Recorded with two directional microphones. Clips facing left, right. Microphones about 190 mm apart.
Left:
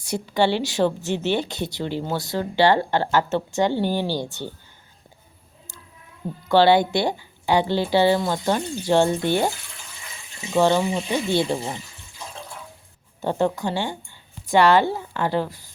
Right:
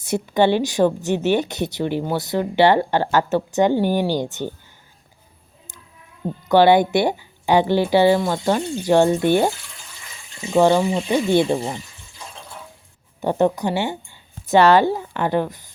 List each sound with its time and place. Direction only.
0.0 s a woman's voice: 20° right (ahead or behind)
6.5 s a woman's voice: 20° right (ahead or behind)
10.5 s a woman's voice: 15° right (ahead or behind)
13.2 s a woman's voice: 20° right (ahead or behind)